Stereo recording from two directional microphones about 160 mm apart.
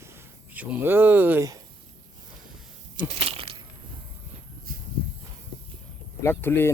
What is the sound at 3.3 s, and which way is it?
Crushing, 35° right (ahead or behind).